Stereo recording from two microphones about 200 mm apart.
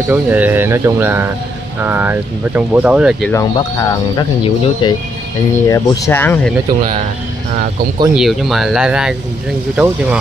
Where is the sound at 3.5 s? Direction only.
20° left (ahead or behind).